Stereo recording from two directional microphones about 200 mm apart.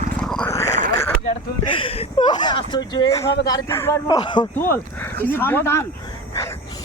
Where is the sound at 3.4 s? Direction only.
15° left (ahead or behind).